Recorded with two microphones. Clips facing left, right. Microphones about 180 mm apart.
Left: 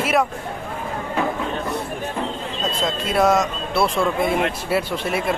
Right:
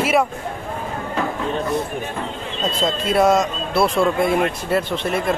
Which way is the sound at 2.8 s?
Centre (ahead or behind).